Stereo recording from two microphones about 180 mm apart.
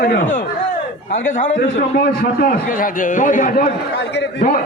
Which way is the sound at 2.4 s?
50° left (ahead or behind).